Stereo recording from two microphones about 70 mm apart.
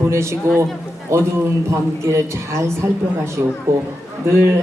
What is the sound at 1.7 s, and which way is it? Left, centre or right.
Speech, right.